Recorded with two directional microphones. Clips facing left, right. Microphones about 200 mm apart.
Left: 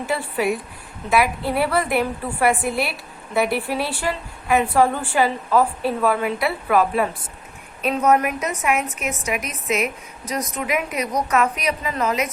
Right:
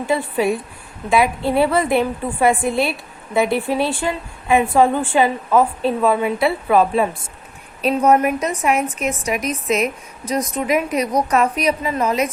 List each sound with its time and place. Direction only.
0.1 s a woman's voice: 25° right (ahead or behind)